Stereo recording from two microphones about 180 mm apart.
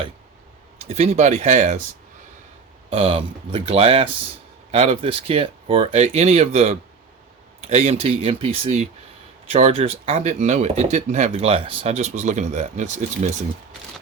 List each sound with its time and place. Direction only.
0.8 s speech: 35° right (ahead or behind)
2.9 s speech: 35° right (ahead or behind)